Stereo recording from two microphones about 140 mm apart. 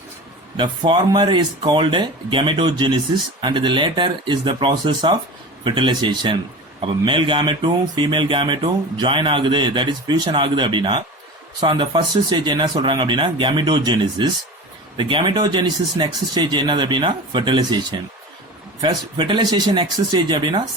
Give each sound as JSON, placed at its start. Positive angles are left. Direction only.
{"t": 0.5, "sound": "speech", "side_deg": -35}
{"t": 18.8, "sound": "speech", "side_deg": -35}